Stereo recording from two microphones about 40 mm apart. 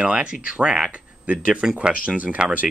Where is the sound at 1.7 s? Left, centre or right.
Right.